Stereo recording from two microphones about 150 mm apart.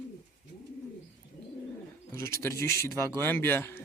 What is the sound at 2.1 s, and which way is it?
A man's voice, 20° left (ahead or behind).